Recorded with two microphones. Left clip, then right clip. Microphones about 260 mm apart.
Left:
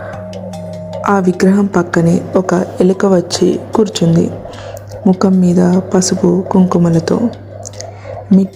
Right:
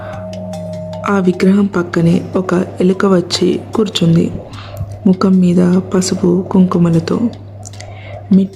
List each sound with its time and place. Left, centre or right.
0.5 s music: centre
1.7 s a woman's voice: centre
6.3 s speech: centre
6.7 s speech: centre